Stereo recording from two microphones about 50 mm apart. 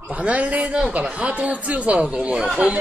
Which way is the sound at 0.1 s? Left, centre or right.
Right.